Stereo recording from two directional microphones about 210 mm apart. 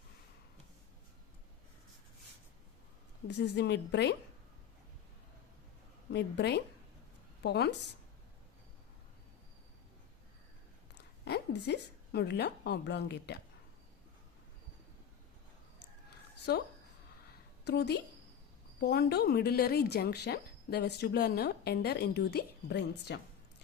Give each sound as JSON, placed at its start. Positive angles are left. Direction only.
{"t": 3.2, "sound": "a woman's voice", "side_deg": 55}
{"t": 6.1, "sound": "a woman's voice", "side_deg": 55}
{"t": 11.3, "sound": "speech", "side_deg": 50}
{"t": 16.5, "sound": "speech", "side_deg": 50}
{"t": 17.7, "sound": "speech", "side_deg": 50}